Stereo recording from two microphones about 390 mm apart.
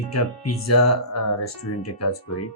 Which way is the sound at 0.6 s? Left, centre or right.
Left.